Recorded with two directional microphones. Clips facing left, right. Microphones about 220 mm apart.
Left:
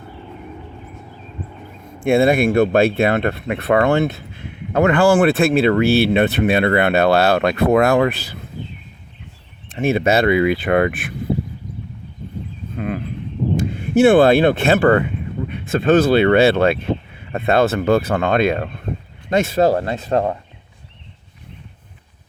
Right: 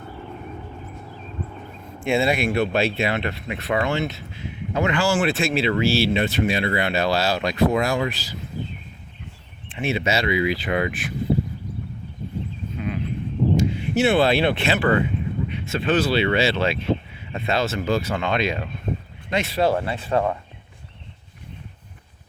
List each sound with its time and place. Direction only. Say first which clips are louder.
2.0 s speech: left 7 dB; 55° left (ahead or behind)
9.6 s speech: left 7 dB; 45° left (ahead or behind)
12.7 s a sound: left 5 dB; 55° left (ahead or behind)
13.6 s speech: left 10 dB; 50° left (ahead or behind)